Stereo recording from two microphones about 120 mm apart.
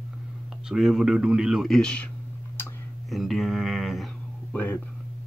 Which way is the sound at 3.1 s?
Centre (ahead or behind).